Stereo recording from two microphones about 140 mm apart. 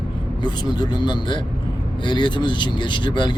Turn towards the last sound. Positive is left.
turn(degrees=35)  # may be behind; listen again after turning